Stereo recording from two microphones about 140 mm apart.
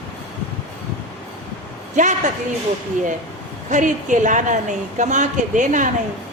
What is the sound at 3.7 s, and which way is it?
A woman's voice, 65° right (ahead or behind).